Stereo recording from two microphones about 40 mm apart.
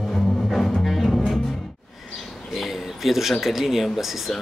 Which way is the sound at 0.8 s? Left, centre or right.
Centre.